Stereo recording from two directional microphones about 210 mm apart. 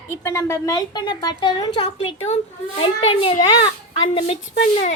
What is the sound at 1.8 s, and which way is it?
A child's voice, 30° left (ahead or behind).